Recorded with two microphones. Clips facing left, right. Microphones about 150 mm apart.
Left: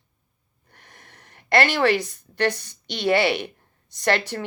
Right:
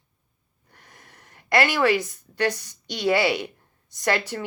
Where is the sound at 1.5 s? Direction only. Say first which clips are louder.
Left 1 dB; 70° left (ahead or behind).